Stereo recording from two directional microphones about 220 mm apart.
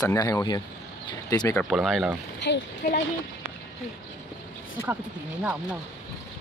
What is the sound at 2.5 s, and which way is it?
Speech, 50° left (ahead or behind).